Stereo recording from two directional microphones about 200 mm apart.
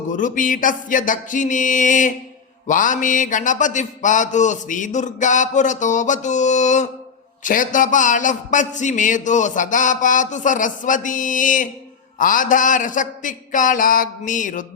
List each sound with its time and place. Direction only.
0.1 s a man's voice: 40° left (ahead or behind)